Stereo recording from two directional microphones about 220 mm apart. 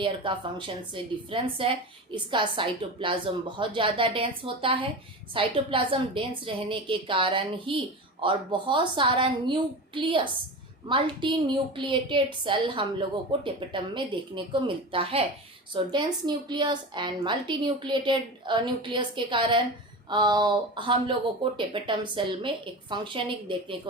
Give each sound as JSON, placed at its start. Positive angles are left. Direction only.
{"t": 0.0, "sound": "a woman's voice", "side_deg": -20}